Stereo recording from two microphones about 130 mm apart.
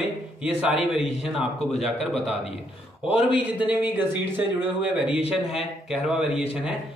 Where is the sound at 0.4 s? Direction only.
10° right (ahead or behind).